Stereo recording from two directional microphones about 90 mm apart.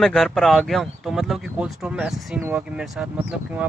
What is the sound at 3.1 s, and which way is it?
Speech, 15° right (ahead or behind).